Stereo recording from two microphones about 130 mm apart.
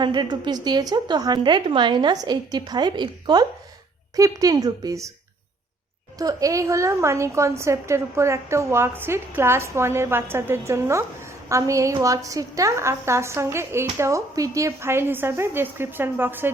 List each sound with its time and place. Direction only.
0.0 s a woman's voice: 35° right (ahead or behind)
6.1 s a woman's voice: 25° right (ahead or behind)